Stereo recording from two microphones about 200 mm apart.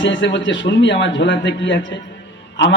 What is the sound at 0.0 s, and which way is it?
A man's voice, 65° left (ahead or behind).